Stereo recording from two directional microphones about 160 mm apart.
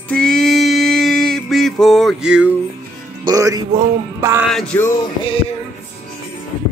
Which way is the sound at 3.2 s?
20° right (ahead or behind).